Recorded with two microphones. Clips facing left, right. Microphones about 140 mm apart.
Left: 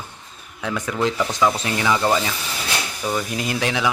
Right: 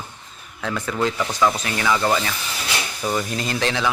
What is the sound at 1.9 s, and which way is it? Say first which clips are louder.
Speech: left 1 dB; 10° left (ahead or behind).